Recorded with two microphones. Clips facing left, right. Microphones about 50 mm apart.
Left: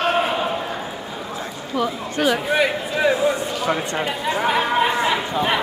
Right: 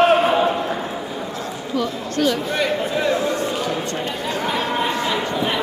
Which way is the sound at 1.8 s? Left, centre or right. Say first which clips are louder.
Even; centre.